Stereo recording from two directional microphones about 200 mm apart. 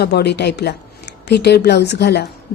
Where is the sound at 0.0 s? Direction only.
55° left (ahead or behind).